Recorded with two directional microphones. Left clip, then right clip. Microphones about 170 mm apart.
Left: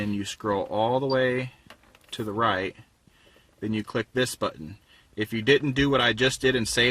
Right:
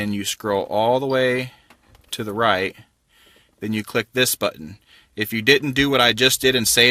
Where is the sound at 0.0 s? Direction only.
20° right (ahead or behind).